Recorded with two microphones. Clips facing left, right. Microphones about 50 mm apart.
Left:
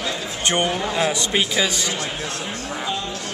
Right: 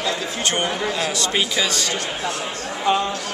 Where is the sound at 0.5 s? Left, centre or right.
Centre.